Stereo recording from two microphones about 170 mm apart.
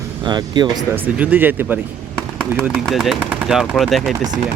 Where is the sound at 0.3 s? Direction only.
25° right (ahead or behind).